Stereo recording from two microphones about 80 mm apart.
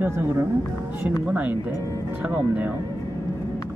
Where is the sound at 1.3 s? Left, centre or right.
Centre.